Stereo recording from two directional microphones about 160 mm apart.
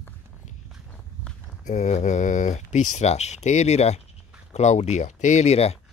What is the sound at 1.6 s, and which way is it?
Speech, 50° left (ahead or behind).